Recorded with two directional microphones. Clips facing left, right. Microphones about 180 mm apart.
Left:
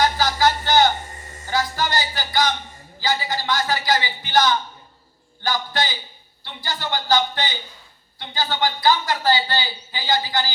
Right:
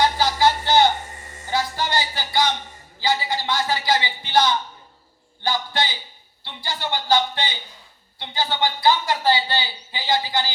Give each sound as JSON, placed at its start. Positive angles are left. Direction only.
{"t": 0.0, "sound": "a sound", "side_deg": -25}
{"t": 1.5, "sound": "music", "side_deg": -25}
{"t": 3.0, "sound": "speech", "side_deg": -25}